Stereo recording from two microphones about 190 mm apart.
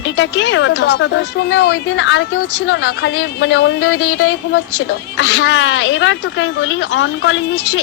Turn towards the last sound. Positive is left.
turn(degrees=70)  # may be behind; listen again after turning